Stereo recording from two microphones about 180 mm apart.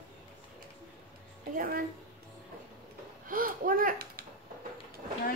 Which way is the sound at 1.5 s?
50° right (ahead or behind).